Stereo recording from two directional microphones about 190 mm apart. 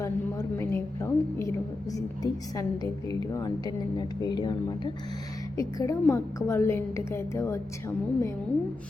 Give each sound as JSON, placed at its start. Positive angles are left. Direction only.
{"t": 0.0, "sound": "a woman's voice", "side_deg": 15}